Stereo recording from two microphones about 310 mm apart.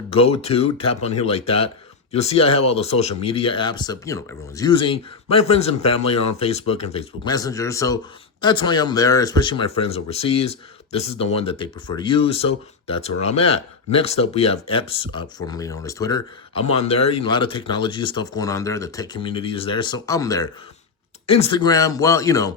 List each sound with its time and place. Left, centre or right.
0.1 s speech: centre